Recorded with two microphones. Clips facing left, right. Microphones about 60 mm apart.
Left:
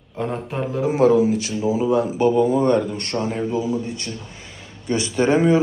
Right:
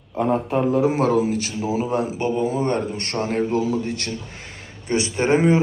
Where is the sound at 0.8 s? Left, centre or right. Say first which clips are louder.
Left 3 dB; right.